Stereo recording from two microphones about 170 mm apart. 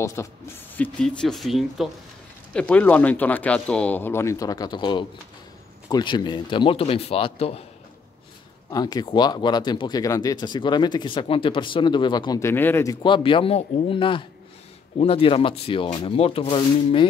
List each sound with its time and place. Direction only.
0.0 s speech: 20° left (ahead or behind)
0.7 s speech: 5° left (ahead or behind); by 7.6 s 35° left (ahead or behind)
8.6 s speech: 20° left (ahead or behind)
13.0 s speech: 30° left (ahead or behind)